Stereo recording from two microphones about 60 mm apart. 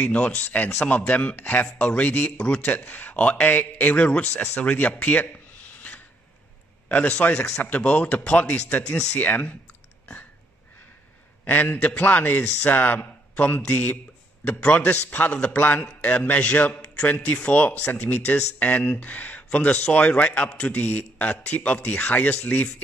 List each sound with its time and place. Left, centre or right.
0.0 s speech: left
5.0 s a sound: left
6.9 s speech: left
11.4 s speech: left
16.8 s a sound: centre
17.4 s speech: left